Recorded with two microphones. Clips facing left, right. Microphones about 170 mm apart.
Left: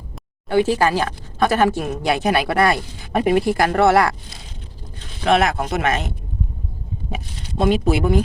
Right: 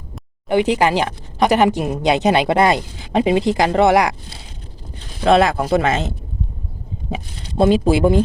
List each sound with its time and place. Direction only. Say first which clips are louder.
0.4 s speech: right 1 dB; 20° right (ahead or behind)
5.2 s speech: right 3 dB; 30° right (ahead or behind)